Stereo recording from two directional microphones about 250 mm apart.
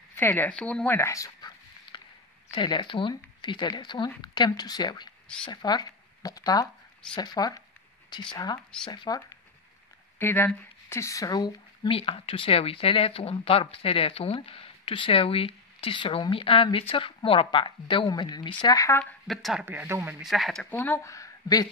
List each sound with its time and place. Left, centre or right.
0.1 s speech: centre